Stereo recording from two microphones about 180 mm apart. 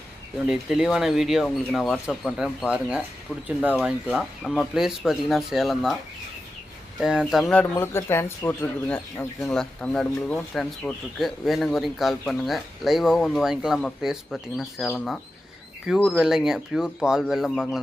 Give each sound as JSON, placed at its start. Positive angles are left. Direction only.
{"t": 0.4, "sound": "a man's voice", "side_deg": -5}
{"t": 7.0, "sound": "a man's voice", "side_deg": -5}